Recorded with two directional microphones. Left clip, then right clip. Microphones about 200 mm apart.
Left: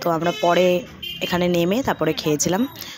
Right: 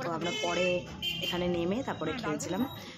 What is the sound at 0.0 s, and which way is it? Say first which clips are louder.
Speech: left 13 dB; 40° left (ahead or behind).